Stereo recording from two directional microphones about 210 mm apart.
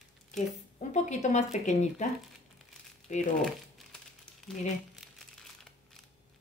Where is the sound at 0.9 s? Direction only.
35° left (ahead or behind).